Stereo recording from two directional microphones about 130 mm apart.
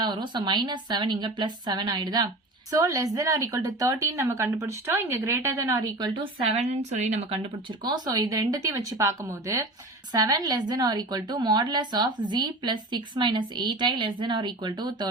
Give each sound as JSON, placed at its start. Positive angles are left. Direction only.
{"t": 0.0, "sound": "a woman's voice", "side_deg": -35}
{"t": 6.5, "sound": "a woman's voice", "side_deg": -60}
{"t": 7.8, "sound": "a woman's voice", "side_deg": -30}